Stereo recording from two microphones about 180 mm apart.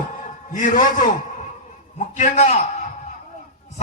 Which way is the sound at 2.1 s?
40° left (ahead or behind).